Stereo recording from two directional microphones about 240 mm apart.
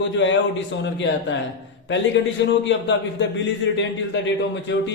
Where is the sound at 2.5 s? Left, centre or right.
Left.